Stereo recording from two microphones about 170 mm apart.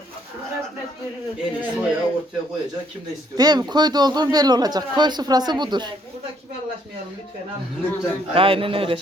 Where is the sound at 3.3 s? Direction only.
25° right (ahead or behind).